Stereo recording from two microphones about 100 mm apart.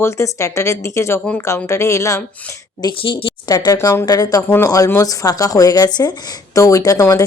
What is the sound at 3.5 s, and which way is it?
Speech, 40° left (ahead or behind).